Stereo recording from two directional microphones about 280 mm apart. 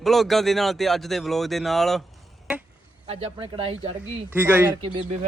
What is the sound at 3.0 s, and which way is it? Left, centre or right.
Speech, right.